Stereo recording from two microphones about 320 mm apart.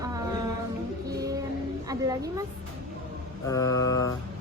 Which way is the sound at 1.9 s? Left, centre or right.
Centre.